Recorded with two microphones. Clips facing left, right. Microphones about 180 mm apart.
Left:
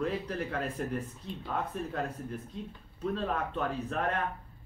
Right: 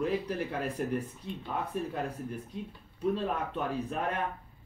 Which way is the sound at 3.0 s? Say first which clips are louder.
Right 2 dB; 10° right (ahead or behind).